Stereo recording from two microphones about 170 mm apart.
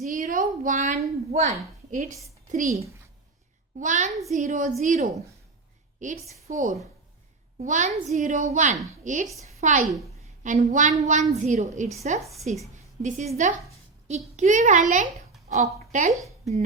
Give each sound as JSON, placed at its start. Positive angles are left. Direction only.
{"t": 0.0, "sound": "a woman's voice", "side_deg": -50}
{"t": 3.8, "sound": "a woman's voice", "side_deg": -45}